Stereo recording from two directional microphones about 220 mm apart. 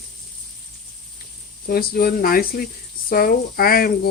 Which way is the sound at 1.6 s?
45° left (ahead or behind).